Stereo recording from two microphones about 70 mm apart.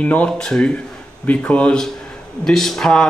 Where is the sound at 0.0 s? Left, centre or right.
Centre.